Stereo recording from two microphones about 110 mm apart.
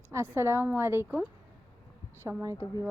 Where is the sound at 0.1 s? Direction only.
25° right (ahead or behind).